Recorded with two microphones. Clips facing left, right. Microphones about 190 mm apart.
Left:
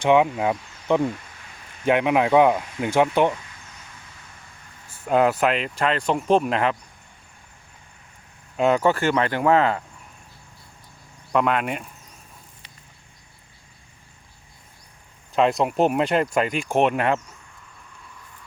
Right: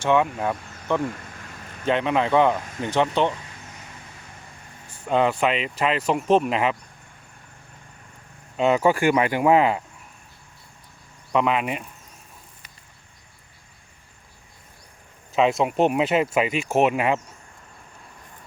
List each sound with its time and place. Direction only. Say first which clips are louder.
0.0 s speech: left 3 dB; 15° left (ahead or behind)
1.1 s a sound: right 1 dB; 50° right (ahead or behind)
1.8 s speech: left 3 dB; 10° left (ahead or behind)
5.0 s speech: left 2 dB; 5° left (ahead or behind)
8.5 s speech: even; centre (ahead or behind)
11.3 s speech: even; centre (ahead or behind)
15.3 s speech: even; centre (ahead or behind)